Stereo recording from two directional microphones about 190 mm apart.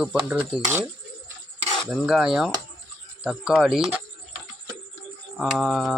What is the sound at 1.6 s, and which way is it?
Cutlery, 30° right (ahead or behind).